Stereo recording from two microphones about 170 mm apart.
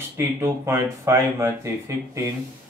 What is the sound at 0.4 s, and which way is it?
Speech, 15° right (ahead or behind).